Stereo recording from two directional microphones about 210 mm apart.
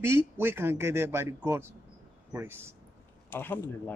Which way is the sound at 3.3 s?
10° left (ahead or behind).